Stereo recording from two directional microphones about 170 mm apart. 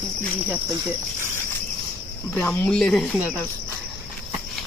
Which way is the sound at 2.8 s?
Centre (ahead or behind).